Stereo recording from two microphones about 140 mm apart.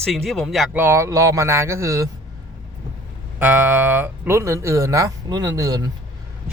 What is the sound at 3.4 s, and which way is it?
Speech, 10° right (ahead or behind).